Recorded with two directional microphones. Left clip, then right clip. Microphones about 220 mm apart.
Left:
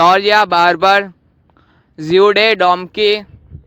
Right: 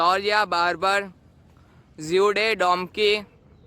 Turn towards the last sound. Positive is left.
turn(degrees=25)  # may be behind; listen again after turning